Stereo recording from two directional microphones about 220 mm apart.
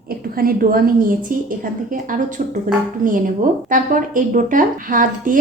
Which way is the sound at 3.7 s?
35° right (ahead or behind).